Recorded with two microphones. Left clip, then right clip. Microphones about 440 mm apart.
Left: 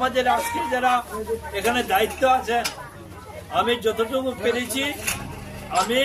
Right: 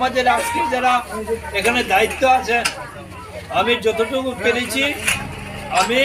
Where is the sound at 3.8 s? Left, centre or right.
Left.